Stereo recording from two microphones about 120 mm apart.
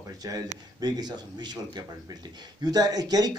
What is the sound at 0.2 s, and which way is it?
Speech, 30° right (ahead or behind).